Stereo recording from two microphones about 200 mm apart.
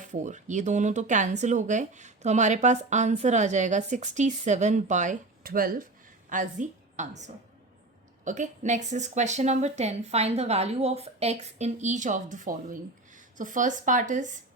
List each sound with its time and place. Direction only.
0.0 s a woman's voice: 35° right (ahead or behind)